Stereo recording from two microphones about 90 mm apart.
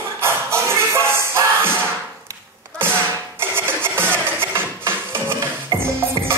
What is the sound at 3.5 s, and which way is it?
Music, 25° right (ahead or behind).